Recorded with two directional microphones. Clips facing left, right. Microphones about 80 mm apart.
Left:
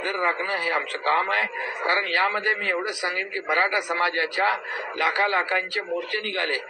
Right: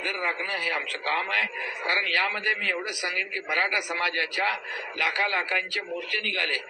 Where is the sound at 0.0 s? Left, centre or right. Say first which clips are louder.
Left 5 dB; left.